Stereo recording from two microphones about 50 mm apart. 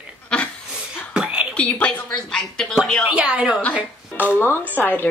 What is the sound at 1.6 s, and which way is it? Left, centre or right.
A woman's voice, left.